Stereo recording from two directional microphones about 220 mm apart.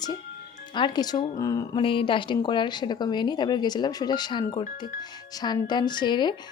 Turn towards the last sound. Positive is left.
turn(degrees=20)  # may be behind; listen again after turning